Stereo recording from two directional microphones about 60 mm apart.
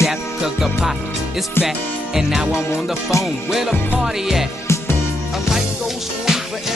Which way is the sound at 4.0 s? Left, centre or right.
Centre.